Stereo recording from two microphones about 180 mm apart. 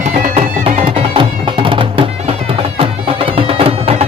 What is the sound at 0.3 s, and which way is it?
Music, 35° right (ahead or behind).